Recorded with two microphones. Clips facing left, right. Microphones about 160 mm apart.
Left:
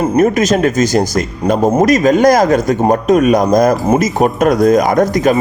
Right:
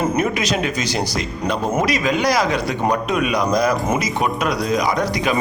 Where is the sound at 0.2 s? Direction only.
45° left (ahead or behind).